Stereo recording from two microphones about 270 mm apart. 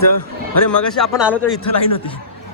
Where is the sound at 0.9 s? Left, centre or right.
Centre.